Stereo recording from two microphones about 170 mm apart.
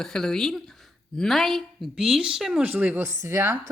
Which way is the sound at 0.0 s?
5° left (ahead or behind).